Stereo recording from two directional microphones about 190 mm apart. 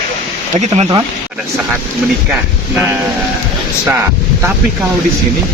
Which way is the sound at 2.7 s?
10° right (ahead or behind).